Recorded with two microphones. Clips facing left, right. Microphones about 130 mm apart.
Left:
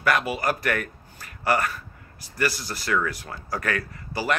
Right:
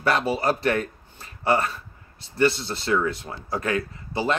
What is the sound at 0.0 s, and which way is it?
A man's voice, 30° right (ahead or behind).